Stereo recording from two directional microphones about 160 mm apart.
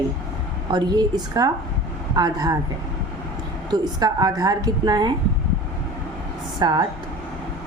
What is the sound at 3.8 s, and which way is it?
A woman's voice, 25° right (ahead or behind).